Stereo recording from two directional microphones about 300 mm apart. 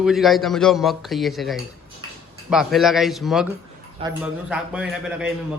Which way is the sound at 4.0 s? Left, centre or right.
Centre.